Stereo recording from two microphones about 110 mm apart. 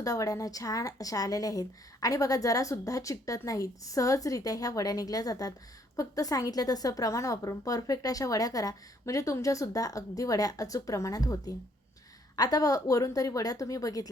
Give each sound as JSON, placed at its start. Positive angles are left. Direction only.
{"t": 0.0, "sound": "a woman's voice", "side_deg": 30}